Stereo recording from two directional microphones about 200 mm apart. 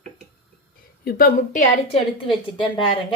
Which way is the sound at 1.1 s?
50° left (ahead or behind).